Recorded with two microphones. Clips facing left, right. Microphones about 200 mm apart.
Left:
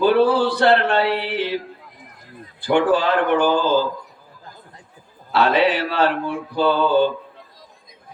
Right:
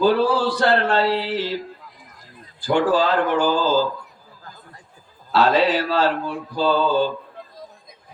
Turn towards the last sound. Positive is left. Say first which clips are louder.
# left 2 dB
turn(degrees=60)  # may be behind; listen again after turning